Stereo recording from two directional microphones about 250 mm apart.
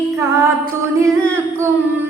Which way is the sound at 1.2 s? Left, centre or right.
Centre.